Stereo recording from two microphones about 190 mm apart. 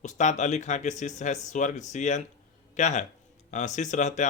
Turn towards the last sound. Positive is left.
turn(degrees=40)  # may be behind; listen again after turning